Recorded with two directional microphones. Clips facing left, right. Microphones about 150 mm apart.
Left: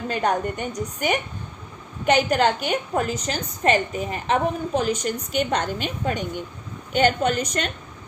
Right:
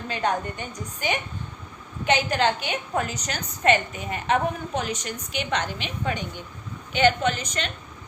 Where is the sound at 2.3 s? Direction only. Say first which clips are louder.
Left 3 dB; 45° left (ahead or behind).